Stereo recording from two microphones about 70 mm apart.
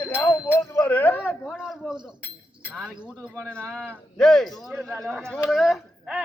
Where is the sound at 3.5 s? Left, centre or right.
Centre.